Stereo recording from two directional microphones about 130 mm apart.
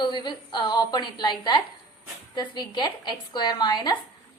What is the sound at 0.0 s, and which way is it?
A woman's voice, 35° left (ahead or behind).